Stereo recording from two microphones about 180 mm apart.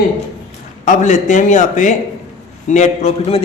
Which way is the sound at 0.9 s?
45° left (ahead or behind).